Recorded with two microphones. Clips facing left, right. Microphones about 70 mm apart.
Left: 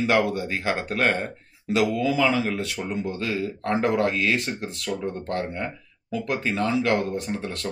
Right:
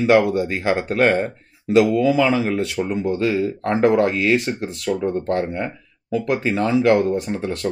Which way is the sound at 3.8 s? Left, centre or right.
Right.